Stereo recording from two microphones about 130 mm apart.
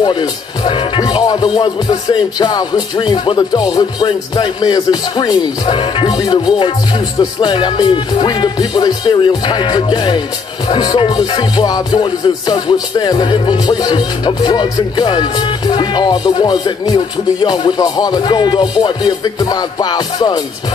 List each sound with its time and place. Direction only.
0.0 s music: 35° left (ahead or behind)